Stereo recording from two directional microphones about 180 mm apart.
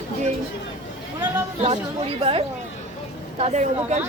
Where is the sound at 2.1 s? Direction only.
30° right (ahead or behind).